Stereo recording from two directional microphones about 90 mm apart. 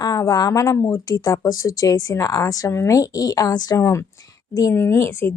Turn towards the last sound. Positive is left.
turn(degrees=30)  # may be behind; listen again after turning